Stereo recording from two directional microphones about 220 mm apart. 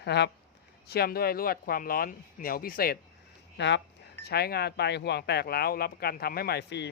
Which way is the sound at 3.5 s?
55° left (ahead or behind).